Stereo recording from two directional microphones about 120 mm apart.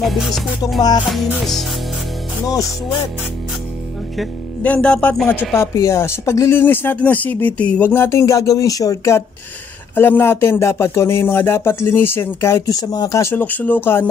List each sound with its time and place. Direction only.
0.0 s music: centre (ahead or behind)
0.7 s music: 35° left (ahead or behind)
1.0 s music: centre (ahead or behind)
4.6 s speech: 10° left (ahead or behind)
5.6 s a sound: 25° left (ahead or behind)